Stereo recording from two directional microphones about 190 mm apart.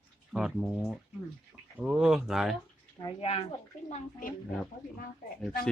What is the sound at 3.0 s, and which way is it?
Speech, 25° left (ahead or behind).